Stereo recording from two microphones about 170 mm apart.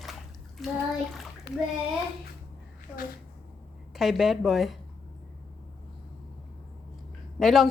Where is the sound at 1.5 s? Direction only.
75° left (ahead or behind).